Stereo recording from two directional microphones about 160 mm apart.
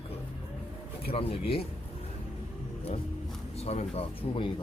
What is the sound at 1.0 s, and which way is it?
Speech, 35° left (ahead or behind).